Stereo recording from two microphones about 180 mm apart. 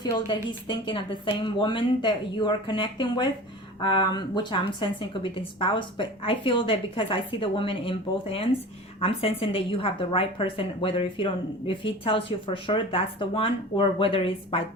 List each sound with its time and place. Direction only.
0.0 s a woman's voice: 25° left (ahead or behind)